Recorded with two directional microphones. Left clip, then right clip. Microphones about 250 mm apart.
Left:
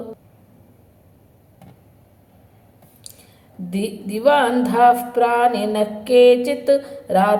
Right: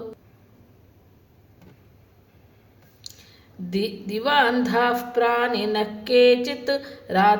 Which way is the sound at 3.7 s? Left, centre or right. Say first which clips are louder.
Left 1 dB; centre.